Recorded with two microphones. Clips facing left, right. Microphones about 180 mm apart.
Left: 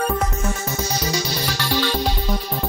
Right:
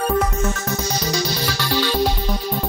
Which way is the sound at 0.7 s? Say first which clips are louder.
Right 1 dB; 10° left (ahead or behind).